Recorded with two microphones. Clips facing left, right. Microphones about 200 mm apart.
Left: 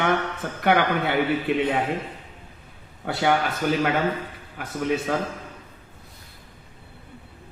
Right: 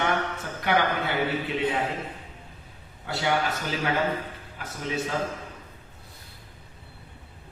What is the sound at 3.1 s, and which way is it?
Speech, 55° left (ahead or behind).